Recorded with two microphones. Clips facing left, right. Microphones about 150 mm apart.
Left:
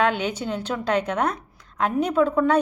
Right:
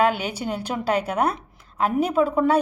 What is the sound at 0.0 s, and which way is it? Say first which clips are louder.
Speech: right 1 dB; 10° right (ahead or behind).